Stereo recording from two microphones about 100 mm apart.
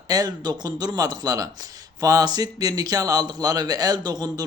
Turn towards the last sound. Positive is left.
turn(degrees=-40)  # may be behind; listen again after turning